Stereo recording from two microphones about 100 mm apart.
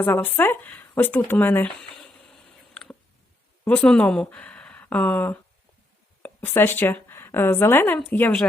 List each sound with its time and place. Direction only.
0.0 s speech: 20° left (ahead or behind)
2.3 s a sound: 5° left (ahead or behind)
3.6 s a woman's voice: 20° left (ahead or behind)